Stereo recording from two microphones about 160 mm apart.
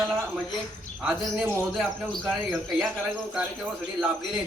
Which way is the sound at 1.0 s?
5° right (ahead or behind).